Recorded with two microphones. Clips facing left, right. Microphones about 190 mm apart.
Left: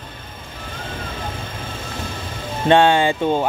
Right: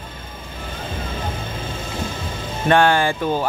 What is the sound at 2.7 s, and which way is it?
Speech, 20° left (ahead or behind).